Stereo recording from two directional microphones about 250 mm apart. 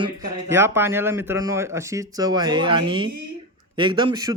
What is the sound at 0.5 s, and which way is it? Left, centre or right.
A man's voice, centre.